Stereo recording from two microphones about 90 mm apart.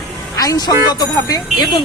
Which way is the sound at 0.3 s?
45° left (ahead or behind).